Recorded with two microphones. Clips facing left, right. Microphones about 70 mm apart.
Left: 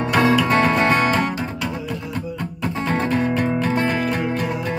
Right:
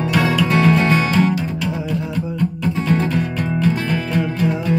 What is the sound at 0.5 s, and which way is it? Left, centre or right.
Music, left.